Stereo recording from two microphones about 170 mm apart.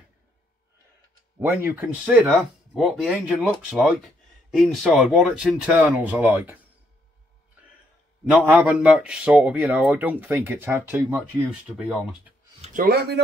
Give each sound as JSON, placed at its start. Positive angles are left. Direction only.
{"t": 1.4, "sound": "a man's voice", "side_deg": -10}
{"t": 8.3, "sound": "a man's voice", "side_deg": -10}
{"t": 12.8, "sound": "speech", "side_deg": -70}